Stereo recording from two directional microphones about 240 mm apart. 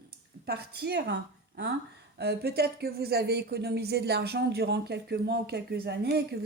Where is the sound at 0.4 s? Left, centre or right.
Right.